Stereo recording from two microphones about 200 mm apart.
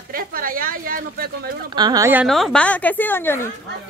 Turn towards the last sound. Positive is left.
turn(degrees=10)  # may be behind; listen again after turning